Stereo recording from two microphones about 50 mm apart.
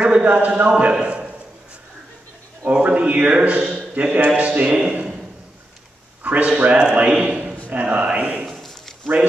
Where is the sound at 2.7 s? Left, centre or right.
Right.